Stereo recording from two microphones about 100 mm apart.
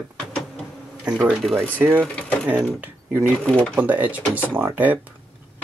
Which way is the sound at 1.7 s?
20° right (ahead or behind).